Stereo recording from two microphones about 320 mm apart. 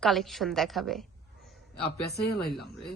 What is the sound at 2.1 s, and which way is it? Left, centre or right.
Speech, left.